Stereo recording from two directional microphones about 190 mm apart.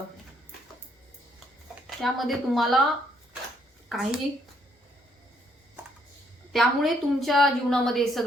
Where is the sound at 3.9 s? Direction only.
Centre (ahead or behind).